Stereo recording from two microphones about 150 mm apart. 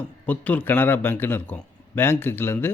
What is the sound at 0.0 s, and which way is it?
Speech, 10° left (ahead or behind).